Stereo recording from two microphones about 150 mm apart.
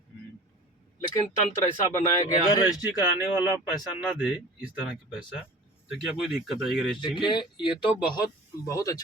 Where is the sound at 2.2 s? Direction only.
25° left (ahead or behind).